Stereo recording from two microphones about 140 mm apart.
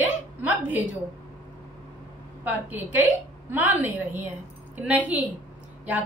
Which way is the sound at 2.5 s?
15° right (ahead or behind).